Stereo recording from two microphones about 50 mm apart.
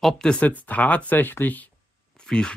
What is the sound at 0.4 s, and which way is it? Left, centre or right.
Speech, left.